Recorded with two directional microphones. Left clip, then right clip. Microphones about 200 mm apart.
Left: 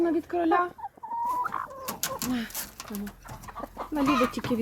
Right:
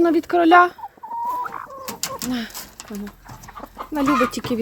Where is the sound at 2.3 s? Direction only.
25° right (ahead or behind).